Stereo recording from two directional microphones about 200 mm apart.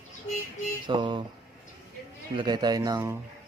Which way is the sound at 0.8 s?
25° right (ahead or behind).